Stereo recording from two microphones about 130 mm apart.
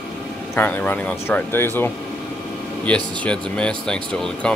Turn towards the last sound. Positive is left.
turn(degrees=5)  # may be behind; listen again after turning